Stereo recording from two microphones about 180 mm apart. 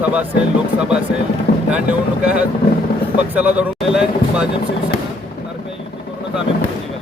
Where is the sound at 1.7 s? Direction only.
5° right (ahead or behind).